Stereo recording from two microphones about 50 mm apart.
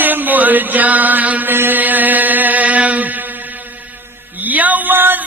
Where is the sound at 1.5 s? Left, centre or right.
Right.